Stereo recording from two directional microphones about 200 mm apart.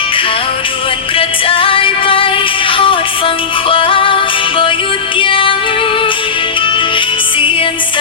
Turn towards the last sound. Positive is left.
turn(degrees=25)  # may be behind; listen again after turning